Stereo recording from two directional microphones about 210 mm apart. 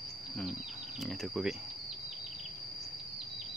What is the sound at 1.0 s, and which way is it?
Speech, centre (ahead or behind).